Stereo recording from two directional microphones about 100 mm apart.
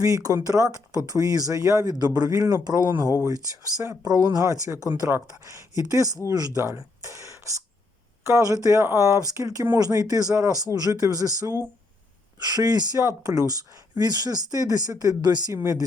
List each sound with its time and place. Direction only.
0.0 s speech: 35° right (ahead or behind)
13.0 s speech: 30° right (ahead or behind); by 15.5 s 45° right (ahead or behind)
15.5 s speech: 30° right (ahead or behind)